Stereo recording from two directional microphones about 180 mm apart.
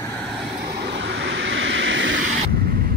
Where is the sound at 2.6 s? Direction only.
55° right (ahead or behind).